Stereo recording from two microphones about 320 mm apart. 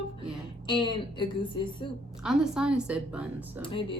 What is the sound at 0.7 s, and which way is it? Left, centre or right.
Speech, centre.